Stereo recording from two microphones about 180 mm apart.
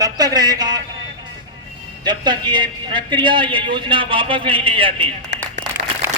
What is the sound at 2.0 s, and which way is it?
A man's voice, 25° right (ahead or behind).